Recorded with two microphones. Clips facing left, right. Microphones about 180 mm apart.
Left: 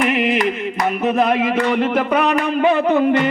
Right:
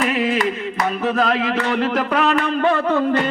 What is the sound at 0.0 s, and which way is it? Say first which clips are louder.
Carnatic music: left 2 dB; 70° left (ahead or behind).